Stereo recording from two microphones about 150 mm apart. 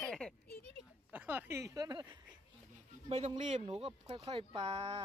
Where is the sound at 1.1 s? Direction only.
10° right (ahead or behind); by 2.2 s 25° right (ahead or behind).